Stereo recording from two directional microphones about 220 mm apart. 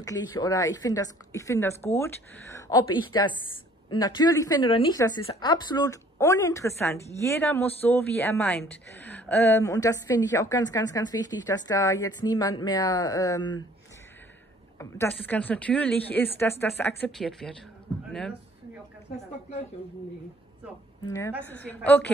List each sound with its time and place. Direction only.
0.0 s speech: 15° left (ahead or behind)
14.8 s speech: 10° left (ahead or behind)
21.0 s a woman's voice: 15° left (ahead or behind)